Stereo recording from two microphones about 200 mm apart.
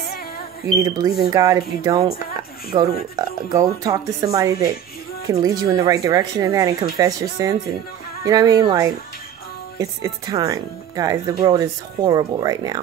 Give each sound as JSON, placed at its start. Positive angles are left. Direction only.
{"t": 0.7, "sound": "speech", "side_deg": -15}